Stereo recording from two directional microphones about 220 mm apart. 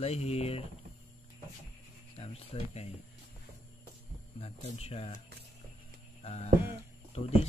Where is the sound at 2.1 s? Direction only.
25° left (ahead or behind).